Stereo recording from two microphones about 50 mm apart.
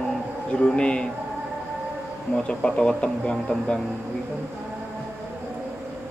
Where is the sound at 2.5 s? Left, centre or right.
Centre.